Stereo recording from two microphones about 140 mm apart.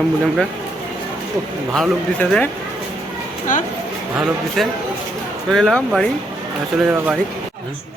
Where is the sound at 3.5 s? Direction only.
65° left (ahead or behind).